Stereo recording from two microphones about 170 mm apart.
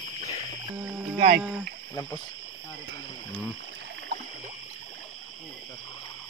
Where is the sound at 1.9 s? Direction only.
20° left (ahead or behind).